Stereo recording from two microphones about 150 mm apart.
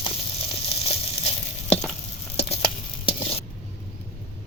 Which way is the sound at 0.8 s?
40° left (ahead or behind).